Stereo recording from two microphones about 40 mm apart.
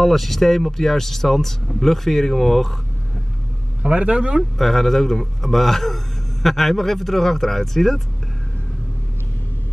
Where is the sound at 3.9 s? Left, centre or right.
Right.